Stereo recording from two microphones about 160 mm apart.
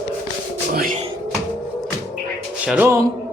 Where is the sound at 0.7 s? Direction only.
60° right (ahead or behind).